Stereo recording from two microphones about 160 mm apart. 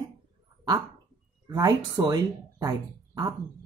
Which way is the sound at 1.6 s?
20° right (ahead or behind).